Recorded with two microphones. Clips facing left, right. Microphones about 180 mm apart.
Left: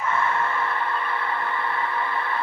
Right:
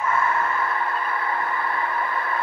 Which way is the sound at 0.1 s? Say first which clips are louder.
Even; 30° left (ahead or behind).